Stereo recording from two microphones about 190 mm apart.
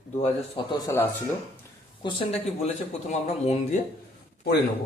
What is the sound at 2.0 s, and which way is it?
A man's voice, 25° left (ahead or behind).